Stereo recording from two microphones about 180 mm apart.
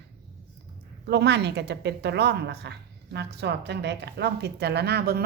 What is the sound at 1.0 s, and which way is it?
A woman's voice, 65° right (ahead or behind).